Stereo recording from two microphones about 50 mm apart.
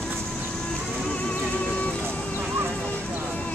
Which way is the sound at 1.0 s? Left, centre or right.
Left.